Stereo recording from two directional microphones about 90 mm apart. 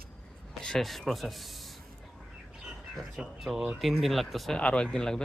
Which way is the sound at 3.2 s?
5° right (ahead or behind).